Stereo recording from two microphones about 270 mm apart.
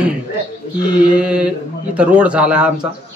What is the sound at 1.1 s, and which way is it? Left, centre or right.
A man's voice, centre.